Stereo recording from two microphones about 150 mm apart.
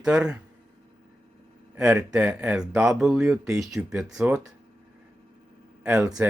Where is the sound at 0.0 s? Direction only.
5° right (ahead or behind).